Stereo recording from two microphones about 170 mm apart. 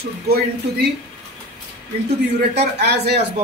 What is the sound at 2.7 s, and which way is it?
Speech, 75° right (ahead or behind).